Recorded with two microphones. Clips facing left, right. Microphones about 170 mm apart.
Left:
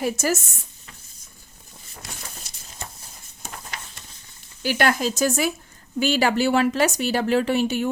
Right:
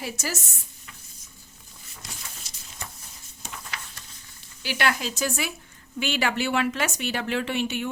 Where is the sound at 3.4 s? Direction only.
45° left (ahead or behind).